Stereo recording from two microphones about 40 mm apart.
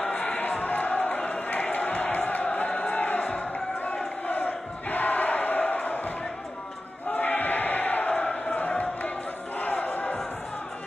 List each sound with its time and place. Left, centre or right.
0.0 s a sound: left
4.3 s crowd: left
8.1 s crowd: left
9.6 s crowd: left